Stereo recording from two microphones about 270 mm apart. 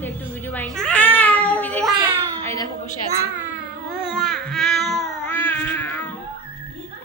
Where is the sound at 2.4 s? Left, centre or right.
Centre.